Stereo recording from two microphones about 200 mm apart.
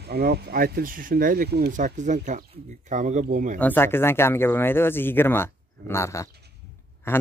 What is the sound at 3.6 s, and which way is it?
Speech, 10° left (ahead or behind).